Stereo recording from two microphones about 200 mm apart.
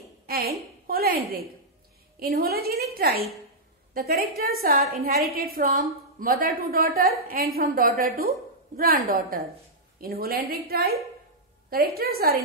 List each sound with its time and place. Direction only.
0.3 s a woman's voice: 50° right (ahead or behind)